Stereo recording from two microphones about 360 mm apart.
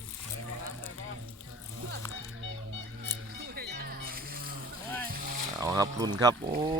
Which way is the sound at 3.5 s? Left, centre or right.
Right.